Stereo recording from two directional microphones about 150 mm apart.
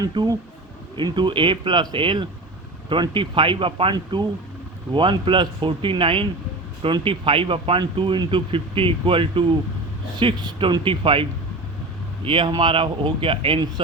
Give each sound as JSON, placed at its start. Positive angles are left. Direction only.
{"t": 0.0, "sound": "speech", "side_deg": -25}